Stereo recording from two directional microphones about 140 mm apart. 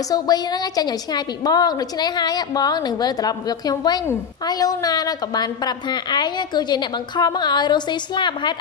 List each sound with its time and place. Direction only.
0.1 s a woman's voice: 30° left (ahead or behind)